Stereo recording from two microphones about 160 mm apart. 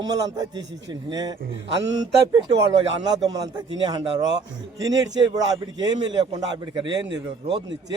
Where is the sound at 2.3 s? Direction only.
30° right (ahead or behind).